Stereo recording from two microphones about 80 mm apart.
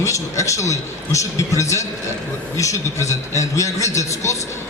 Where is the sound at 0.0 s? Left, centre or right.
Left.